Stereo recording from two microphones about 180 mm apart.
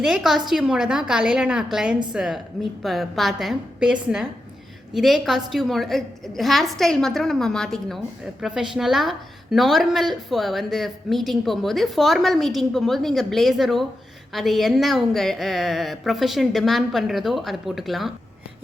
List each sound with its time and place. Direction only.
0.0 s a woman's voice: centre (ahead or behind)